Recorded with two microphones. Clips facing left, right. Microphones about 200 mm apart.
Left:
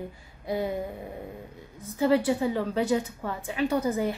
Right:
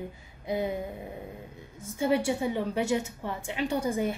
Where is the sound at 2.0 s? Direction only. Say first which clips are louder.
Left 3 dB; 25° right (ahead or behind).